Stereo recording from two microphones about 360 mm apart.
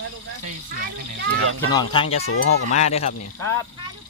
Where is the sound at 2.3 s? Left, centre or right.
Left.